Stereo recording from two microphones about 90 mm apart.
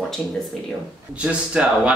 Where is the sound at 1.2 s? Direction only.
10° right (ahead or behind).